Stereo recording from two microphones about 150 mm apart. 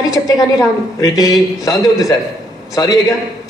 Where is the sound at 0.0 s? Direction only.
25° left (ahead or behind).